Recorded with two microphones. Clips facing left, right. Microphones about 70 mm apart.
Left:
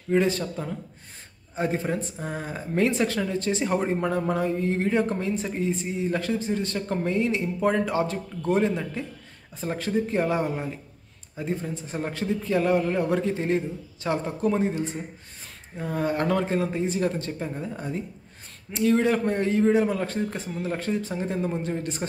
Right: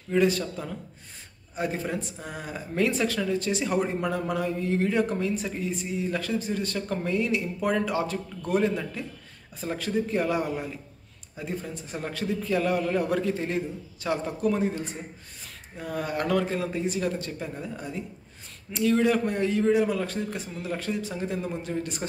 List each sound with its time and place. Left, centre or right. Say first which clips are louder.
0.1 s speech: left 1 dB; left